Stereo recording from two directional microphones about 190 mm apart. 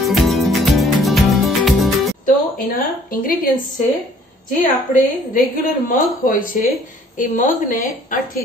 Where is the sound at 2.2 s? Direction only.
50° left (ahead or behind).